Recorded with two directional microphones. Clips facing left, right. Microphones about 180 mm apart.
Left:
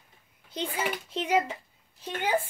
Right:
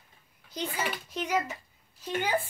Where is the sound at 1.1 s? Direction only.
25° left (ahead or behind).